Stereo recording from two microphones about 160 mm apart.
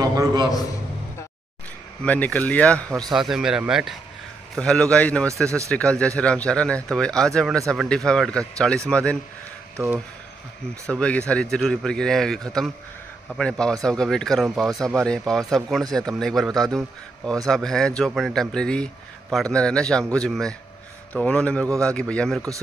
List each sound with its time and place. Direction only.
0.0 s a man's voice: 20° right (ahead or behind)
2.0 s speech: 10° left (ahead or behind)
2.9 s speech: 20° right (ahead or behind)
3.2 s speech: centre (ahead or behind)
9.8 s speech: 20° right (ahead or behind)
10.9 s speech: 5° left (ahead or behind)